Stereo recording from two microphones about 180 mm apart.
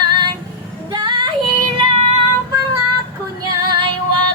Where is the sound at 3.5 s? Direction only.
25° right (ahead or behind).